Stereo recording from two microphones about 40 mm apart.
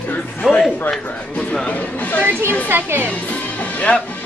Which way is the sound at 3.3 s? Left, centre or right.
Left.